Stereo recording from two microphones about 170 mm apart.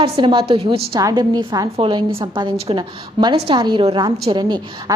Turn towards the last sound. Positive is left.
turn(degrees=-25)  # may be behind; listen again after turning